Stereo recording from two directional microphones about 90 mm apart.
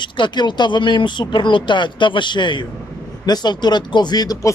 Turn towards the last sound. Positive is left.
turn(degrees=45)  # may be behind; listen again after turning